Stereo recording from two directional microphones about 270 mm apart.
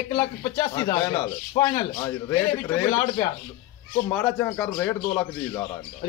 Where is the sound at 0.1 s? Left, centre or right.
Centre.